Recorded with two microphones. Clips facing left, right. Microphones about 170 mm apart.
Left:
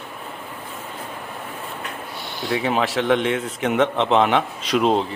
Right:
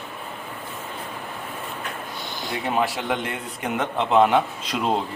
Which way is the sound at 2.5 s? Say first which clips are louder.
Left 3 dB; 90° left.